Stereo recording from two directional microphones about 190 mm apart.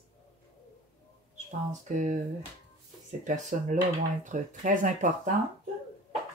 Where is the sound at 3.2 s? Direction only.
40° right (ahead or behind).